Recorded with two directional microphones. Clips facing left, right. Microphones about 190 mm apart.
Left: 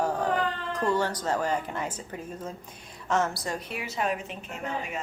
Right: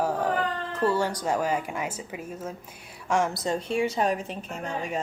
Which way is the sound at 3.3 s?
25° right (ahead or behind).